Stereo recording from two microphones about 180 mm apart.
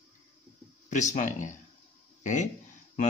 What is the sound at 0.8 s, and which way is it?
Speech, 40° left (ahead or behind).